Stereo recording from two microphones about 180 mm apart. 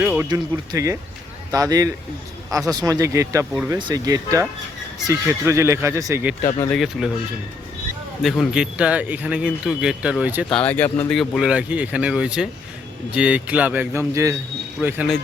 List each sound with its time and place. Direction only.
0.0 s music: 10° right (ahead or behind)
0.3 s speech: 20° right (ahead or behind)
6.7 s speech: centre (ahead or behind)
8.2 s speech: centre (ahead or behind)
10.5 s speech: 10° left (ahead or behind)
11.1 s speech: centre (ahead or behind)